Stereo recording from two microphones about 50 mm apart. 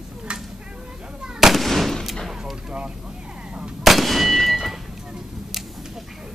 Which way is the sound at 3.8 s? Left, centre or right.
Centre.